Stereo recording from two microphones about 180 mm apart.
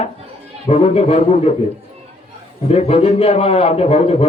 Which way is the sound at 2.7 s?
35° left (ahead or behind).